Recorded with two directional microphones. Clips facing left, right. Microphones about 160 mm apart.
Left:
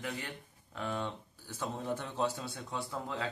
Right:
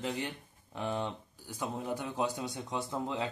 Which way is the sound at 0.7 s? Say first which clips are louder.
Right 2 dB; 20° right (ahead or behind).